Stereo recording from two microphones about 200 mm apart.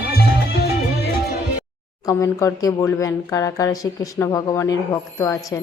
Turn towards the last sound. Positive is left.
turn(degrees=15)  # may be behind; listen again after turning